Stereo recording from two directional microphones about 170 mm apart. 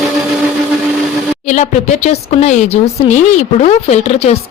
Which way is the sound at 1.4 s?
45° left (ahead or behind).